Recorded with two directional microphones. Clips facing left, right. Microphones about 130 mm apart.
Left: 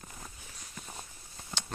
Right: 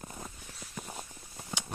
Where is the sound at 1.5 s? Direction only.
15° right (ahead or behind).